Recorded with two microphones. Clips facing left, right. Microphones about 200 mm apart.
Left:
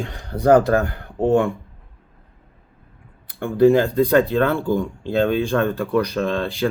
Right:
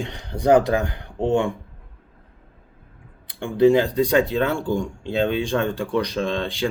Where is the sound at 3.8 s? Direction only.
15° right (ahead or behind).